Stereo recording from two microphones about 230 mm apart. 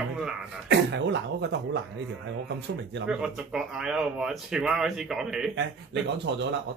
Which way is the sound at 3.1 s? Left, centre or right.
Centre.